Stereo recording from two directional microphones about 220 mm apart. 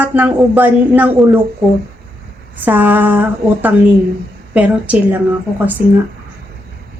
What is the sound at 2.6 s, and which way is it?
A woman's voice, 10° right (ahead or behind).